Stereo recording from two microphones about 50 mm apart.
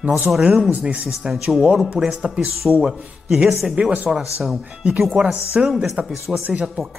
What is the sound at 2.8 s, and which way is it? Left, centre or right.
Speech, centre.